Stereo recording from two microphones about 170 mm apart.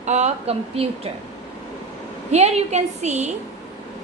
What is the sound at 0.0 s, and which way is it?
Speech, 40° right (ahead or behind).